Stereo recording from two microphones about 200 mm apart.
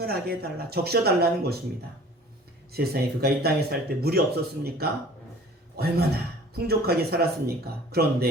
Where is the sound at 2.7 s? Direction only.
50° right (ahead or behind).